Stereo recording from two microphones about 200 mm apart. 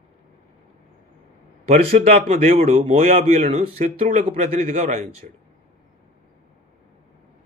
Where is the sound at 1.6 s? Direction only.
30° right (ahead or behind).